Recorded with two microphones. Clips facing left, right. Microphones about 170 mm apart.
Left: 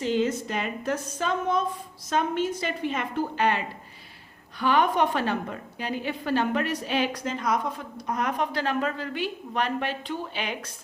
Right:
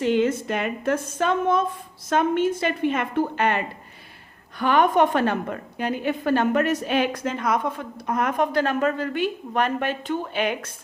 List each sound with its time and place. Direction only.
0.0 s a woman's voice: 60° right (ahead or behind)